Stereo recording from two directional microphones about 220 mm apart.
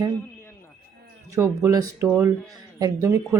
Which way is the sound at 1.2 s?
15° right (ahead or behind).